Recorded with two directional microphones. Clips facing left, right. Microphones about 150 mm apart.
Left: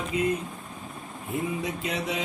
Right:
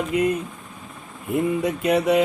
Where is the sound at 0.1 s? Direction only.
65° right (ahead or behind).